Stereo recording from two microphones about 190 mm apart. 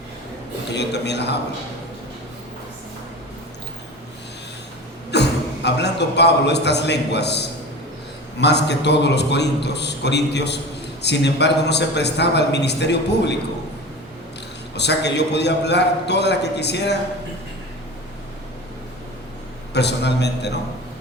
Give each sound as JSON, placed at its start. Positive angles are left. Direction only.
{"t": 0.7, "sound": "a man's voice", "side_deg": 65}
{"t": 5.1, "sound": "a man's voice", "side_deg": 65}
{"t": 14.8, "sound": "a man's voice", "side_deg": 65}
{"t": 19.7, "sound": "a man's voice", "side_deg": 65}